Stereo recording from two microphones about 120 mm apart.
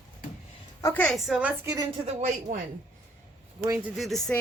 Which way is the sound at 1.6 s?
25° right (ahead or behind).